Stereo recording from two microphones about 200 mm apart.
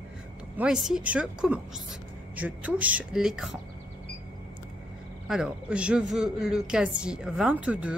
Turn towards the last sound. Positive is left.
turn(degrees=-5)  # may be behind; listen again after turning